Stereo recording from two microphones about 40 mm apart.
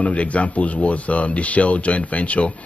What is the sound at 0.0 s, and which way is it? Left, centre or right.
Speech, left.